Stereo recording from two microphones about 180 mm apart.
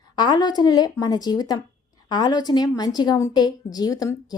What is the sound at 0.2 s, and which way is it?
Speech, 25° left (ahead or behind).